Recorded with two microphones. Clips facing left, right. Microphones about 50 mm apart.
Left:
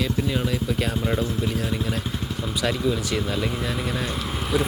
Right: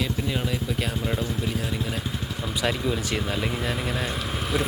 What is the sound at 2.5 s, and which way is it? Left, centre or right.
Speech, right.